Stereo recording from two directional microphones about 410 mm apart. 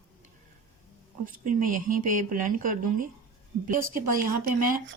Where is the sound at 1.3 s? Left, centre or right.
Centre.